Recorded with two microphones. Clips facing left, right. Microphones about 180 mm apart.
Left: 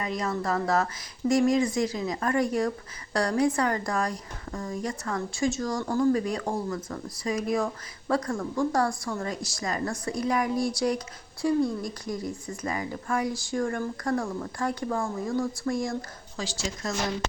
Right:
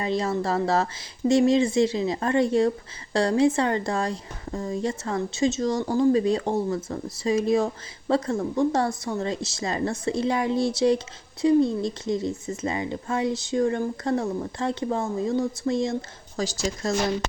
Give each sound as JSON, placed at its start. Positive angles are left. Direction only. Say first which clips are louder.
{"t": 0.0, "sound": "speech", "louder": "right 4 dB", "side_deg": -30}
{"t": 16.4, "sound": "speech", "louder": "right 6 dB", "side_deg": -40}